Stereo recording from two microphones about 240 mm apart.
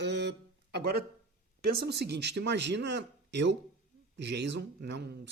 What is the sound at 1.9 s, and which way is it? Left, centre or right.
Speech, right.